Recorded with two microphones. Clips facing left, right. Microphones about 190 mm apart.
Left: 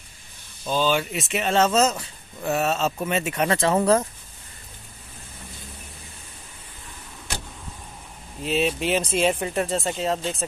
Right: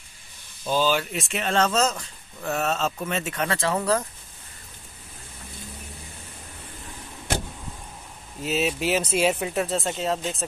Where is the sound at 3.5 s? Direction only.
25° left (ahead or behind).